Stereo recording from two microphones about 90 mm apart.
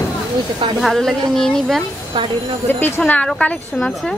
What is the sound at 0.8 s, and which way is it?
A woman's voice, 5° left (ahead or behind).